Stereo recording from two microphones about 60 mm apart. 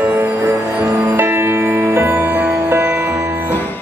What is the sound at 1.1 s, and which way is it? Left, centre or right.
Music, right.